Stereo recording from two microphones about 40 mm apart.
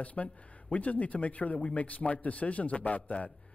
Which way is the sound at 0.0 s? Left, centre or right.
Left.